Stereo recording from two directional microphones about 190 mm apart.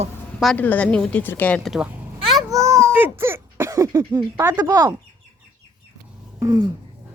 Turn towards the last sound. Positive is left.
turn(degrees=-15)  # may be behind; listen again after turning